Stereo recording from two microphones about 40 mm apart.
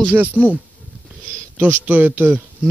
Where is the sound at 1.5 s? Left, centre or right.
Right.